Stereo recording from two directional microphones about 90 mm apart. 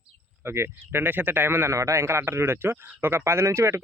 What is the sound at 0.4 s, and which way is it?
Speech, 30° right (ahead or behind).